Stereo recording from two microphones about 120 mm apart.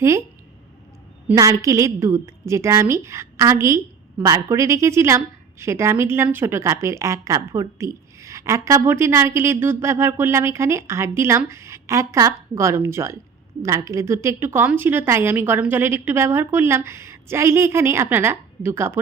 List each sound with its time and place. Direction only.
1.4 s a woman's voice: 25° right (ahead or behind)